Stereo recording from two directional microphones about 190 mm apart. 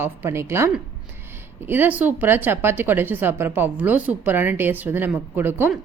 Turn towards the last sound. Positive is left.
turn(degrees=-10)  # may be behind; listen again after turning